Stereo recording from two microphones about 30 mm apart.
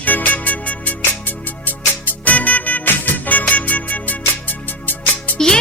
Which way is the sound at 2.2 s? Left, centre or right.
Left.